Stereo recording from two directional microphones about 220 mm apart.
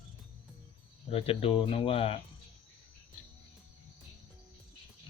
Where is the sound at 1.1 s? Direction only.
25° left (ahead or behind).